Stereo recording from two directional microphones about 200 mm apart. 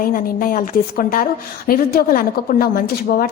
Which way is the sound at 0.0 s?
45° left (ahead or behind).